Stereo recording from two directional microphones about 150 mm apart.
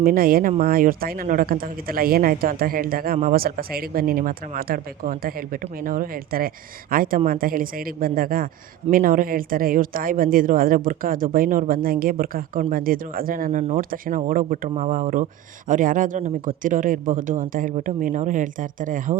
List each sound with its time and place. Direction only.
0.0 s speech: 70° right (ahead or behind)